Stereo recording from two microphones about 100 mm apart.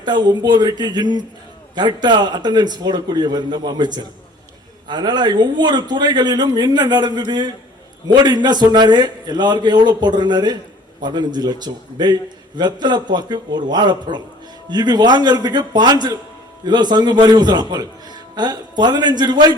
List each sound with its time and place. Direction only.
0.0 s a man's voice: 45° right (ahead or behind)